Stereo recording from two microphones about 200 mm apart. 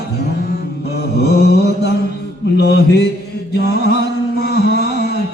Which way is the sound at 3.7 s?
55° left (ahead or behind).